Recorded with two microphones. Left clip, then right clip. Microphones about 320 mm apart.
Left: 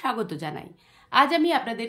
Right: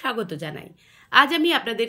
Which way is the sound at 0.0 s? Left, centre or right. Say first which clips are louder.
Right 1 dB; centre.